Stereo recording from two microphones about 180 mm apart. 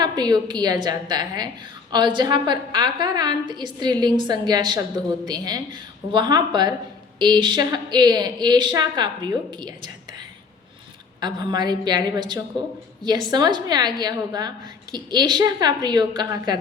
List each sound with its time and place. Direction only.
0.0 s a woman's voice: 20° right (ahead or behind)